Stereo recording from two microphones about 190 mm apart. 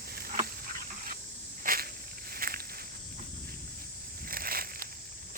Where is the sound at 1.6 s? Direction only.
50° right (ahead or behind).